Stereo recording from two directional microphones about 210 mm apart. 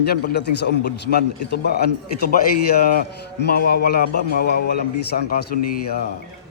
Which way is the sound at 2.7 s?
45° left (ahead or behind).